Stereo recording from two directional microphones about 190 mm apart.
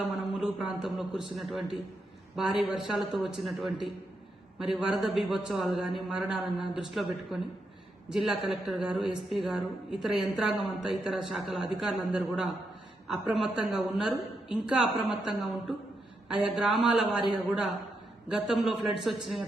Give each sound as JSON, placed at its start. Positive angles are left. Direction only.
{"t": 0.3, "sound": "a woman's voice", "side_deg": -5}